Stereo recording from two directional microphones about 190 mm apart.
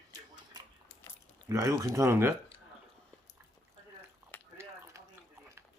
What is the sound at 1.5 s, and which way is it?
Speech, 15° right (ahead or behind).